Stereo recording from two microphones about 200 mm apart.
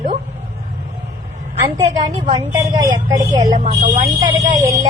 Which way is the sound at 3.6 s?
40° right (ahead or behind).